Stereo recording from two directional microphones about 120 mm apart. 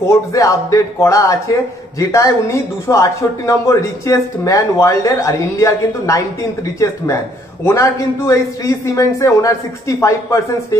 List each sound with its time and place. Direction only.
0.1 s speech: 25° left (ahead or behind)
7.6 s speech: 25° left (ahead or behind)